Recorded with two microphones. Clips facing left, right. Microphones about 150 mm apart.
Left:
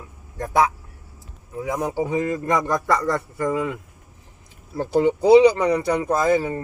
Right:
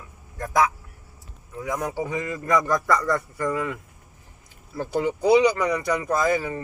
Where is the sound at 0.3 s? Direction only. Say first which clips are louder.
Left 2 dB; 35° left (ahead or behind).